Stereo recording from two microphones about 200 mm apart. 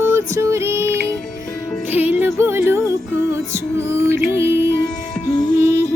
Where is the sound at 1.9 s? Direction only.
10° right (ahead or behind).